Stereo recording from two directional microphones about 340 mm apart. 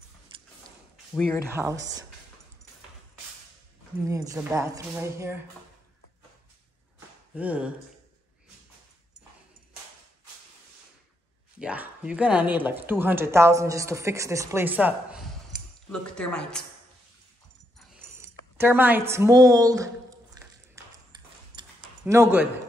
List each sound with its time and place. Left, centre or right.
1.5 s speech: centre
4.0 s speech: centre
7.3 s speech: centre
11.6 s speech: centre
17.7 s a sound: centre
20.3 s ping: centre
22.0 s speech: centre